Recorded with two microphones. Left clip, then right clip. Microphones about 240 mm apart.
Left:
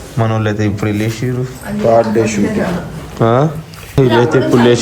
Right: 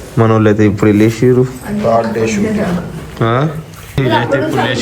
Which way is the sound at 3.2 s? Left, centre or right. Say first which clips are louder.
Left 2 dB; centre.